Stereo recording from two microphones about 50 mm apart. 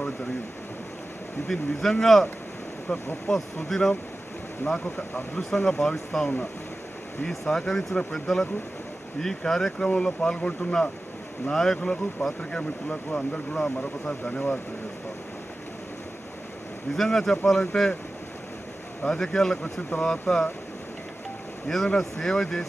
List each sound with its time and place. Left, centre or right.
1.5 s speech: centre
4.8 s speech: left
5.5 s speech: centre
16.9 s speech: centre
19.0 s speech: centre
21.8 s speech: centre